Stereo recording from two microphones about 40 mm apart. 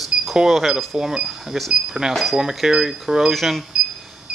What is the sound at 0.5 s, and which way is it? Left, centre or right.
Speech, centre.